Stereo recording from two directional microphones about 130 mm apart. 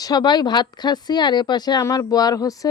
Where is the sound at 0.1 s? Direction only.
35° left (ahead or behind).